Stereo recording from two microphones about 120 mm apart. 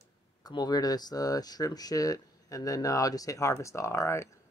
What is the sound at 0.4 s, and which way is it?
Speech, 35° left (ahead or behind).